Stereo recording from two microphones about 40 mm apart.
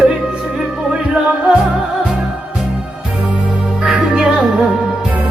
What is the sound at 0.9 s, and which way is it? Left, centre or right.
Music, centre.